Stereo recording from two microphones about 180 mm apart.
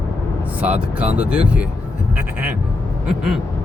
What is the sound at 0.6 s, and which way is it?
Speech, 10° right (ahead or behind).